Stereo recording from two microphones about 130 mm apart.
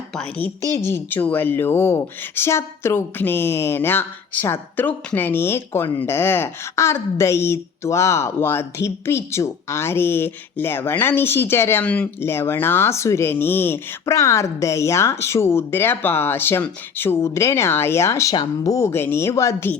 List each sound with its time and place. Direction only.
0.2 s a woman's voice: 10° left (ahead or behind)
0.6 s speech: 25° right (ahead or behind)
0.9 s speech: 15° left (ahead or behind)